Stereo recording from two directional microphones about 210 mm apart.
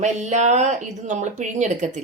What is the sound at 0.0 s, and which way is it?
Speech, 35° right (ahead or behind).